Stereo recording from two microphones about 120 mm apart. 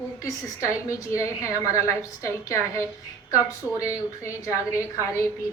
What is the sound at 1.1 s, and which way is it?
A woman's voice, 25° left (ahead or behind).